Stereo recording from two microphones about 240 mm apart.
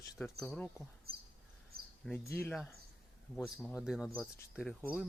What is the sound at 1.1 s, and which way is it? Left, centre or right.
Cricket, right.